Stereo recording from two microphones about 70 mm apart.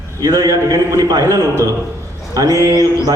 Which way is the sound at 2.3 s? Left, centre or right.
Right.